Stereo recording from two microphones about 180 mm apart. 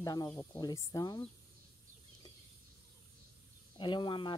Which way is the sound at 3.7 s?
25° left (ahead or behind).